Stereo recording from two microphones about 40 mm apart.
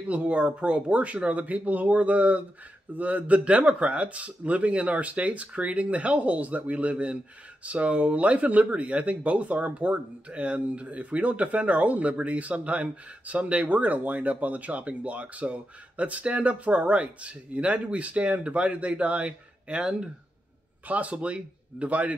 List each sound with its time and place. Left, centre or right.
0.1 s speech: right
3.3 s speech: right
19.8 s speech: centre
20.8 s speech: right